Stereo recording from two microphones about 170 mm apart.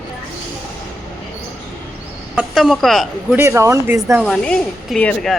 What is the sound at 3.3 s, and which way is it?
Speech, 15° right (ahead or behind).